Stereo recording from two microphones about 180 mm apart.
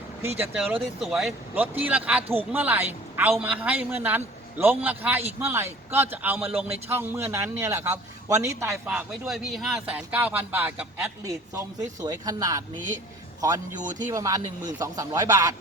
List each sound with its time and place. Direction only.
0.2 s speech: 10° right (ahead or behind)
8.9 s speech: 5° right (ahead or behind)
13.7 s speech: 45° right (ahead or behind)
14.1 s speech: 15° right (ahead or behind)